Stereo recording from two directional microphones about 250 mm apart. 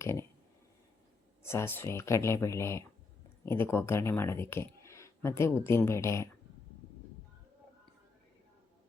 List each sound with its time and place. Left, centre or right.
0.0 s speech: centre
1.4 s speech: centre